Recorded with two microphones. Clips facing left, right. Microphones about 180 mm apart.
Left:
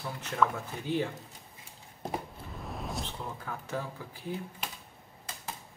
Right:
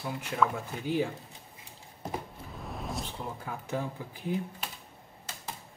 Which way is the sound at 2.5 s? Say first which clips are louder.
Right 1 dB; centre (ahead or behind).